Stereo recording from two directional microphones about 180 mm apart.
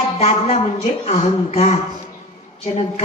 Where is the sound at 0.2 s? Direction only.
35° left (ahead or behind).